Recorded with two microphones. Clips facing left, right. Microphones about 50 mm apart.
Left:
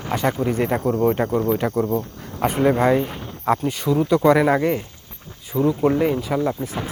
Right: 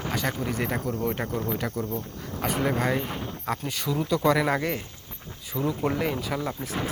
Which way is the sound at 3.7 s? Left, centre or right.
Centre.